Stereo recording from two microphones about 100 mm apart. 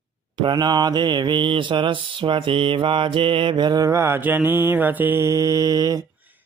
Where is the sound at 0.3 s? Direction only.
45° right (ahead or behind).